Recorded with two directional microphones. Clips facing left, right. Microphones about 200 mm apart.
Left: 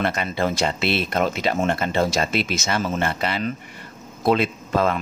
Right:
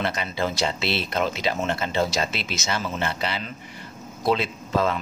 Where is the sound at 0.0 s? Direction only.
55° left (ahead or behind).